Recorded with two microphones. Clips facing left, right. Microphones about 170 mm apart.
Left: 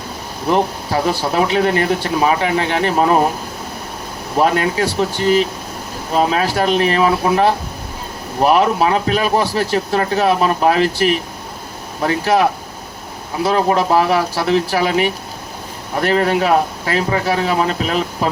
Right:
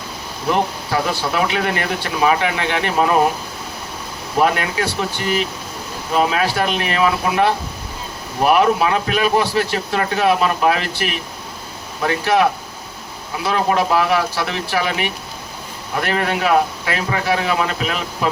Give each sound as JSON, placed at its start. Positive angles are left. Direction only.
{"t": 0.9, "sound": "speech", "side_deg": 35}
{"t": 4.5, "sound": "speech", "side_deg": 35}
{"t": 8.5, "sound": "speech", "side_deg": 35}
{"t": 13.4, "sound": "speech", "side_deg": 35}